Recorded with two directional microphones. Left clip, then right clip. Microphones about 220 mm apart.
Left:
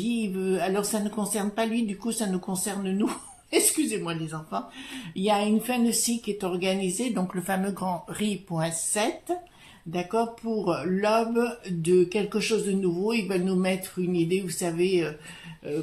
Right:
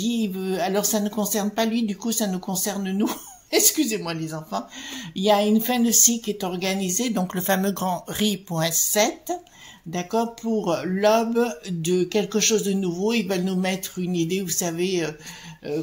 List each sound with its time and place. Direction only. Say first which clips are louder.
0.0 s a woman's voice: right 2 dB; 35° right (ahead or behind)